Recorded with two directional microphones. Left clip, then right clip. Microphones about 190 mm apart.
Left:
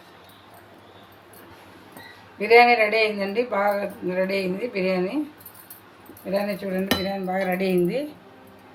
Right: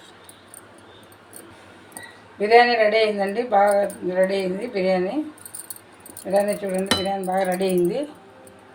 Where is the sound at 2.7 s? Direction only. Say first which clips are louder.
Right 2 dB; 15° left (ahead or behind).